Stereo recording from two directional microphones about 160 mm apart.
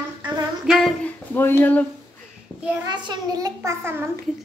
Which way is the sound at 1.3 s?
15° left (ahead or behind).